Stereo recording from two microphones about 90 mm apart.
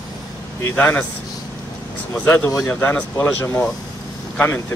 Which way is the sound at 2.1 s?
20° left (ahead or behind).